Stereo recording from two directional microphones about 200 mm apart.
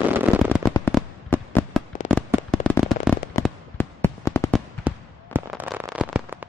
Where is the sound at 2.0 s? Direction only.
Centre (ahead or behind).